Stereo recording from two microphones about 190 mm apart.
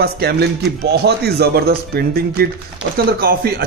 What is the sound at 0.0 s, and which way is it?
Speech, 55° right (ahead or behind).